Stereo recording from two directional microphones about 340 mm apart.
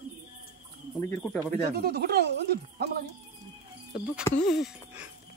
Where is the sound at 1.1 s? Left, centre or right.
Centre.